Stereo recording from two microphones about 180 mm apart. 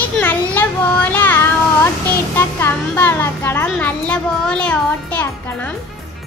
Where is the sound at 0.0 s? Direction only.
10° left (ahead or behind).